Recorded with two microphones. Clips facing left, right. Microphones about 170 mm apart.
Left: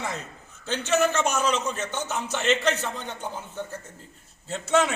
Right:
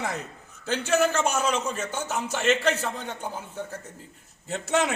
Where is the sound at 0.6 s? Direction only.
10° right (ahead or behind).